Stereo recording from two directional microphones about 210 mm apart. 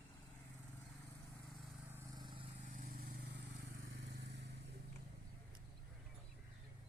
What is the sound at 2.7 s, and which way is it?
Vehicle, 45° right (ahead or behind).